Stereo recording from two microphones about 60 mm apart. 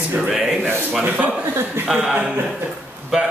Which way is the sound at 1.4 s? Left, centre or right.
Right.